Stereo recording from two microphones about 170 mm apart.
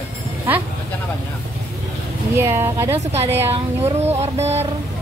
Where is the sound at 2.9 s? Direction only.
35° right (ahead or behind).